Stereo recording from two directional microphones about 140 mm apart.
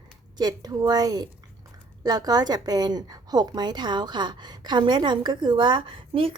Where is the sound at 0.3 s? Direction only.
30° right (ahead or behind).